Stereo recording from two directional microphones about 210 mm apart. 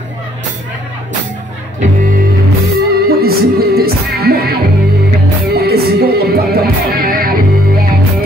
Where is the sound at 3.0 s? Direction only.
45° right (ahead or behind).